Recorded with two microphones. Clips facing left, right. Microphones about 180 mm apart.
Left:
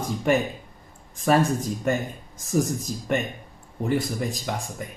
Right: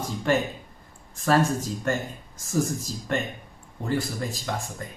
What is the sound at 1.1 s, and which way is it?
Speech, 15° left (ahead or behind).